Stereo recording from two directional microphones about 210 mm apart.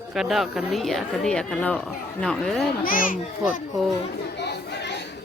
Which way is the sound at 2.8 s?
40° left (ahead or behind).